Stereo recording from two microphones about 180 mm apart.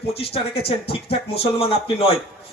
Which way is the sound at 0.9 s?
30° left (ahead or behind).